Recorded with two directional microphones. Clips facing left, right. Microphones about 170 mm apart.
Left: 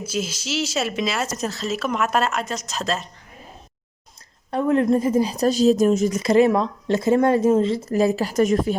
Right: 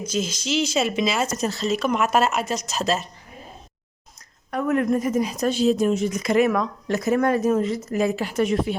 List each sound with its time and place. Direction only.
0.0 s speech: 5° left (ahead or behind)
4.5 s a woman's voice: 30° left (ahead or behind)
6.1 s speech: 30° left (ahead or behind)